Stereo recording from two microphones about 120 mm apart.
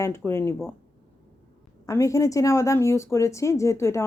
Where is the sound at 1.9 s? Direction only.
25° left (ahead or behind).